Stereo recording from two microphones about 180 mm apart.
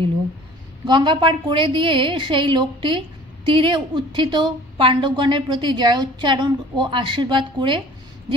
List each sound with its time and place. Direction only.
0.8 s a woman's voice: 25° right (ahead or behind)